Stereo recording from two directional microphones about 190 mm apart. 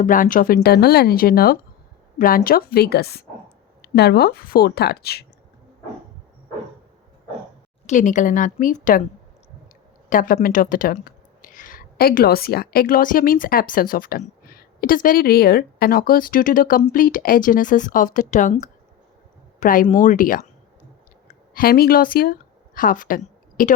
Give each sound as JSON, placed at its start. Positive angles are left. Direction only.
{"t": 0.0, "sound": "speech", "side_deg": 45}
{"t": 7.9, "sound": "speech", "side_deg": 40}
{"t": 10.1, "sound": "speech", "side_deg": 45}
{"t": 21.5, "sound": "speech", "side_deg": 50}